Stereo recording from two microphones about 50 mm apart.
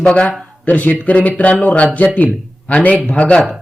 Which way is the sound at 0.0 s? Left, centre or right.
Left.